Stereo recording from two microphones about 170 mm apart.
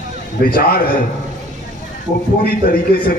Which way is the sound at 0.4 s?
60° left (ahead or behind).